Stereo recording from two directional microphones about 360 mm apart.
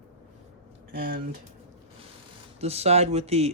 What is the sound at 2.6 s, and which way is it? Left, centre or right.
Speech, centre.